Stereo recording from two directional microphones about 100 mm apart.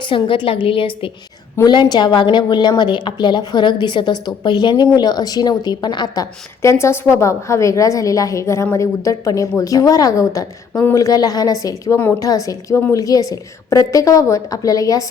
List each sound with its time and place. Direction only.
0.0 s a woman's voice: 60° left (ahead or behind)
1.6 s a woman's voice: 45° left (ahead or behind)
6.6 s a woman's voice: 30° left (ahead or behind)